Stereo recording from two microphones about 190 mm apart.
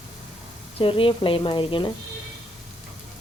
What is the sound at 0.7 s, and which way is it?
Speech, 30° left (ahead or behind).